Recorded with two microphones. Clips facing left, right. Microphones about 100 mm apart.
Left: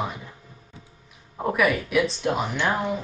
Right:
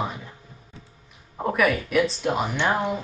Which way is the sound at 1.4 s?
Centre (ahead or behind).